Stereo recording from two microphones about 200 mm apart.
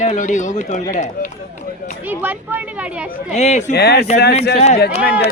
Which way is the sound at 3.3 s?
35° left (ahead or behind).